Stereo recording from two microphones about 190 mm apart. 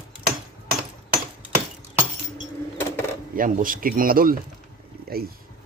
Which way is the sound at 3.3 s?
45° right (ahead or behind).